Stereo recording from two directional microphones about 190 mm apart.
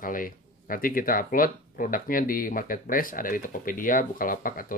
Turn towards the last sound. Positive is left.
turn(degrees=45)  # may be behind; listen again after turning